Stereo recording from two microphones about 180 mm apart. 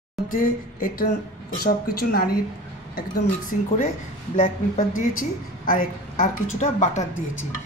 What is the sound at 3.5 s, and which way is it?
Speech, 45° left (ahead or behind).